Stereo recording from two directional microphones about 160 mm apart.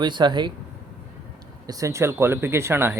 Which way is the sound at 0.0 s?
30° right (ahead or behind).